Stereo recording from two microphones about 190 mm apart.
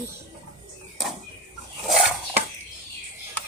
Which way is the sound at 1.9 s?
Centre (ahead or behind).